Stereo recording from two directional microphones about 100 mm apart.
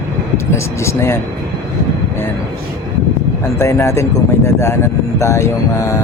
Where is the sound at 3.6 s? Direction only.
25° left (ahead or behind).